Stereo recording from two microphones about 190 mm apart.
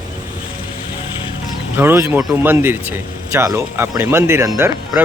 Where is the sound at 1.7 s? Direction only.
10° right (ahead or behind).